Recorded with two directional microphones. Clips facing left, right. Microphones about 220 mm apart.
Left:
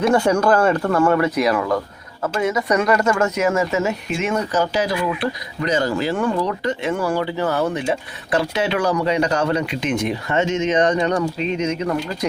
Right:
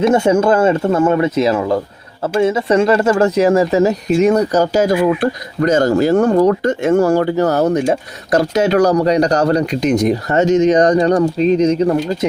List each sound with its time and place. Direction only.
0.0 s speech: 20° right (ahead or behind)
12.0 s speech: 25° right (ahead or behind)